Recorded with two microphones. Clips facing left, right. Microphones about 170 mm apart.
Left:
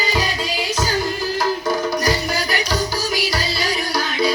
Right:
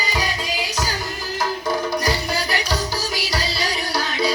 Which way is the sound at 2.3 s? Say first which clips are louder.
Left 1 dB; 30° right (ahead or behind).